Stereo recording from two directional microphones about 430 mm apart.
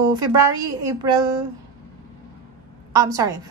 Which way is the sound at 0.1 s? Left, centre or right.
Centre.